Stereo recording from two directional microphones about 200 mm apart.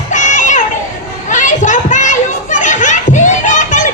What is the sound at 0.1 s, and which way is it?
Children playing, 40° left (ahead or behind).